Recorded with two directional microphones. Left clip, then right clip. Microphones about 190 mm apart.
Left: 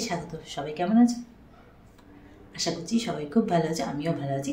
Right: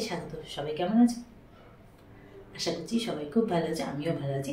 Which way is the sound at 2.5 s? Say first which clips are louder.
Left 3 dB; 40° left (ahead or behind).